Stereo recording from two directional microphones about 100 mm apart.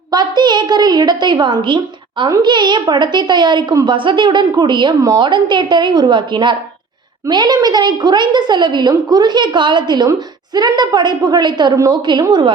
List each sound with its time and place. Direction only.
0.1 s a woman's voice: 45° right (ahead or behind)